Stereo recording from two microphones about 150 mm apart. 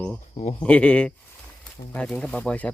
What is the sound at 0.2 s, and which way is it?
Speech, 50° left (ahead or behind).